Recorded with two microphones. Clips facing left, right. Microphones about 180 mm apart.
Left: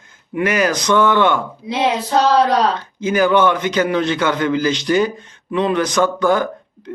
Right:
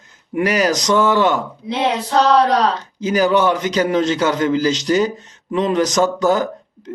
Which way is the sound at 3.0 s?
40° right (ahead or behind).